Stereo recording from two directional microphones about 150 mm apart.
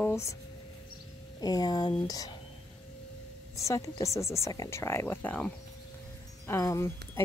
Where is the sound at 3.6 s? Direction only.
20° left (ahead or behind).